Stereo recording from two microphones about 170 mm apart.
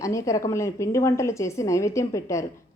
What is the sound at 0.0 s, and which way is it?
A woman's voice, 20° left (ahead or behind).